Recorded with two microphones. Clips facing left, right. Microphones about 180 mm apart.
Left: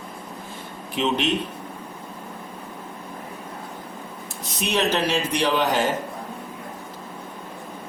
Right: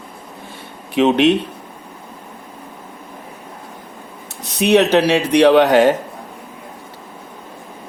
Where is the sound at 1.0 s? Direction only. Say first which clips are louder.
Right 11 dB; 70° right (ahead or behind).